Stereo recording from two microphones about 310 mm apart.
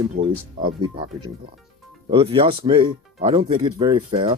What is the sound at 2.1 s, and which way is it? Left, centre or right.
Speech, centre.